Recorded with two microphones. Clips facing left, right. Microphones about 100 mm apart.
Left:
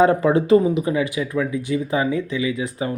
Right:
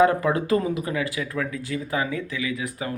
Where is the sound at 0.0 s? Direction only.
30° left (ahead or behind).